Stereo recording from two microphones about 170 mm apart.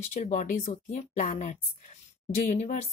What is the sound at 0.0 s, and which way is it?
Speech, 45° left (ahead or behind).